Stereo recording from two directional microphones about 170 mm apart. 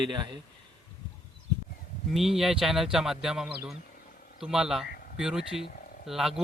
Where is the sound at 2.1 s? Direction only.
Centre (ahead or behind).